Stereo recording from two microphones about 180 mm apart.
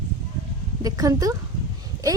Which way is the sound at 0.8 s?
20° right (ahead or behind).